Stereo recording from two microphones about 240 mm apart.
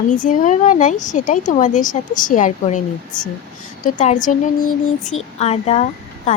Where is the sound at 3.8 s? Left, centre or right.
Left.